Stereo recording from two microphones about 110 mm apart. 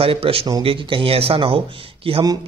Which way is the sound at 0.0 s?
60° right (ahead or behind).